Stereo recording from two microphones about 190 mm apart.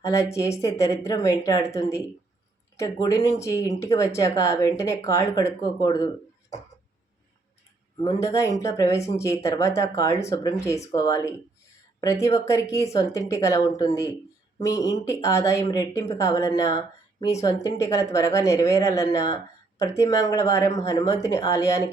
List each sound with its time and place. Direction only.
0.1 s speech: 15° left (ahead or behind)
8.0 s speech: 15° left (ahead or behind)